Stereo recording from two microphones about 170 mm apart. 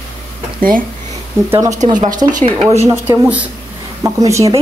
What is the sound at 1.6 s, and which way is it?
Speech, 45° right (ahead or behind).